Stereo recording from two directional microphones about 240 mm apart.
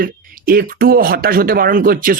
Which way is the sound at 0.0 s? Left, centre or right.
Right.